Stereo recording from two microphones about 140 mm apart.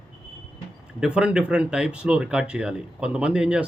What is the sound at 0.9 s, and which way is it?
Speech, 5° right (ahead or behind).